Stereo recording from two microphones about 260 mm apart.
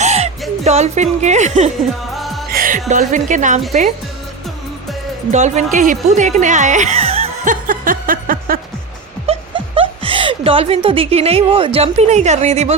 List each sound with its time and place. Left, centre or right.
0.0 s music: right
0.6 s speech: right
2.1 s music: centre
2.5 s music: right
2.9 s speech: right
5.3 s speech: right
5.7 s music: right
9.2 s speech: right